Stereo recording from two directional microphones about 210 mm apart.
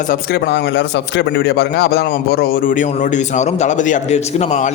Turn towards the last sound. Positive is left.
turn(degrees=35)  # may be behind; listen again after turning